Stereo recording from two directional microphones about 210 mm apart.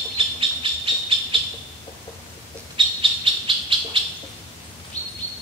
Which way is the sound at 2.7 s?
25° right (ahead or behind).